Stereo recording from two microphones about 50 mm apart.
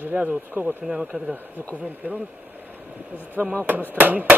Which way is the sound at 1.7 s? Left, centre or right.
Right.